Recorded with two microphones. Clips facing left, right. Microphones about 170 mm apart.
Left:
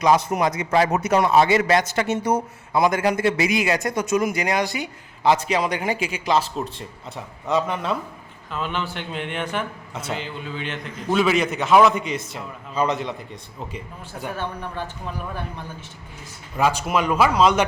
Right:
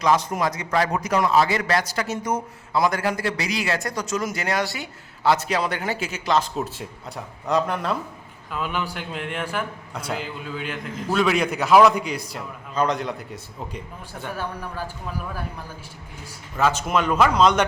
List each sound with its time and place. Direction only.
0.3 s a man's voice: 20° left (ahead or behind)
7.4 s a man's voice: centre (ahead or behind)
16.6 s speech: 10° left (ahead or behind)